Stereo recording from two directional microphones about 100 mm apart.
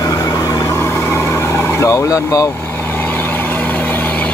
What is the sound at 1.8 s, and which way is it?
Speech, 35° left (ahead or behind).